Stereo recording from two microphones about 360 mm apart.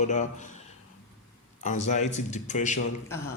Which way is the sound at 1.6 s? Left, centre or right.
Centre.